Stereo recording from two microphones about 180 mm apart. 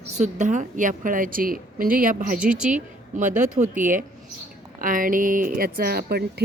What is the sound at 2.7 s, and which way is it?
A woman's voice, 45° right (ahead or behind).